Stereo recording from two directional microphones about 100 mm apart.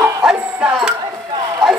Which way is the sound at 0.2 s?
5° right (ahead or behind).